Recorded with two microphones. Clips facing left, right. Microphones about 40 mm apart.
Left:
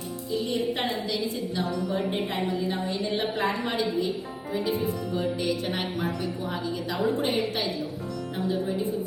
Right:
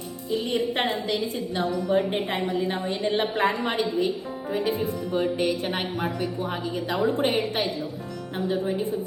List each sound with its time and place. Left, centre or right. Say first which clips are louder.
0.5 s a woman's voice: right 3 dB; right
5.1 s a woman's voice: right 6 dB; right